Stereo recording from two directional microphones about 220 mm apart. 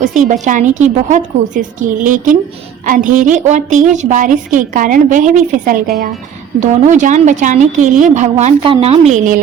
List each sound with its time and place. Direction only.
0.0 s a woman's voice: 35° right (ahead or behind)